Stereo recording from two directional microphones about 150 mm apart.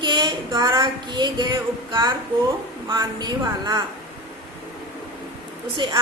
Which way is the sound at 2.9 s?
30° right (ahead or behind).